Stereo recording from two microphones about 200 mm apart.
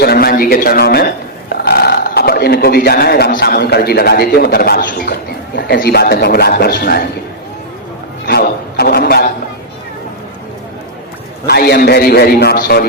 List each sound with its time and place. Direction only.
0.0 s a man's voice: 50° left (ahead or behind)
8.3 s a man's voice: 50° left (ahead or behind)
11.4 s a man's voice: 50° left (ahead or behind)